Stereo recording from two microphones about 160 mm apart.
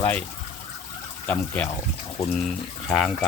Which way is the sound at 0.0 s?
10° left (ahead or behind).